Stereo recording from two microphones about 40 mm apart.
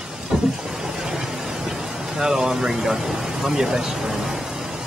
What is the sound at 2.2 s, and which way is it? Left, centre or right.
Speech, centre.